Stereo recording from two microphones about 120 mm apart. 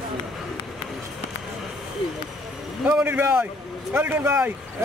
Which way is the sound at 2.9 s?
15° right (ahead or behind).